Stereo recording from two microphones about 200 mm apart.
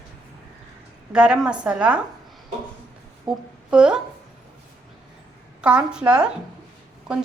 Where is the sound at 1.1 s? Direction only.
5° right (ahead or behind).